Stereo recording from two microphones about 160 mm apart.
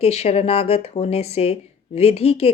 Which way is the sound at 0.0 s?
40° left (ahead or behind).